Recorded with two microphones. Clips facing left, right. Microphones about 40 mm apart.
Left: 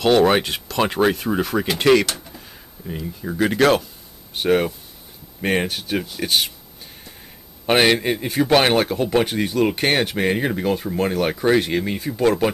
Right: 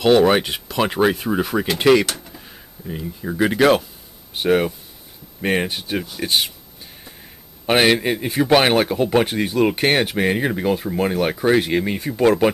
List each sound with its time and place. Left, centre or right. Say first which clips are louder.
0.0 s a man's voice: right 1 dB; centre
7.6 s a man's voice: even; centre